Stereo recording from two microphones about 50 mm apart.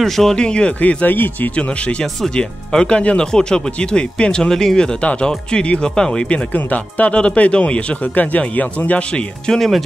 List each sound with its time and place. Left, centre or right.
0.0 s speech: centre
0.5 s speech: centre
0.7 s speech: left
1.6 s speech: left
6.5 s speech: left
9.5 s speech: centre